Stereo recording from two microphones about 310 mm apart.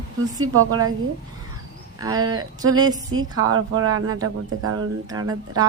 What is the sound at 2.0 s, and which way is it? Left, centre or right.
A woman's voice, centre.